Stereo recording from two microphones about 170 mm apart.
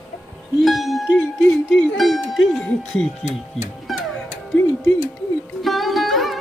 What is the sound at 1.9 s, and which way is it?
Speech, centre (ahead or behind).